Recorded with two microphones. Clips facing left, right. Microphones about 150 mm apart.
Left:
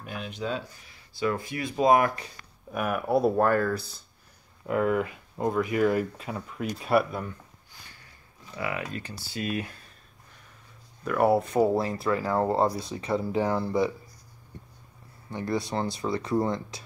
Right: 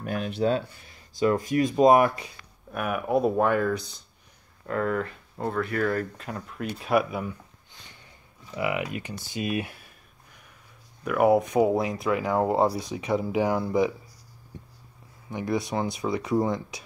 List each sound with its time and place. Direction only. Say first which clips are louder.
0.0 s speech: right 8 dB; 50° right (ahead or behind)
1.2 s speech: right 6 dB; 40° right (ahead or behind)
2.0 s speech: right 3 dB; 20° right (ahead or behind)
2.7 s speech: even; centre (ahead or behind)
4.6 s speech: left 2 dB; 10° left (ahead or behind)
7.8 s a sound: right 2 dB; 20° right (ahead or behind)
8.5 s speech: right 4 dB; 20° right (ahead or behind)
11.1 s speech: right 2 dB; 10° right (ahead or behind)
15.2 s speech: right 2 dB; 15° right (ahead or behind)